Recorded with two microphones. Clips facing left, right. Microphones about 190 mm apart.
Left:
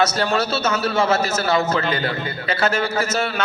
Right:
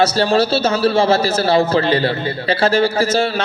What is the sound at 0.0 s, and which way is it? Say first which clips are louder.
A man's voice: right 5 dB; 30° right (ahead or behind).